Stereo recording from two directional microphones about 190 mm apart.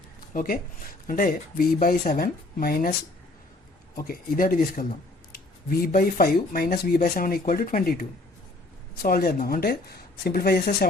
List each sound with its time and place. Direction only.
0.3 s speech: 45° left (ahead or behind)
3.9 s speech: 50° left (ahead or behind)